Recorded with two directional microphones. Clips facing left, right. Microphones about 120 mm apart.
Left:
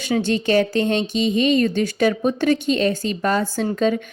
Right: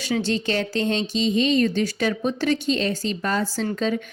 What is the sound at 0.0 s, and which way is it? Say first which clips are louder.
Speech: left 3 dB; 50° left (ahead or behind).